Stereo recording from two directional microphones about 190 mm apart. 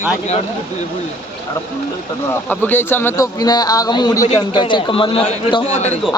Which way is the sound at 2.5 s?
10° left (ahead or behind).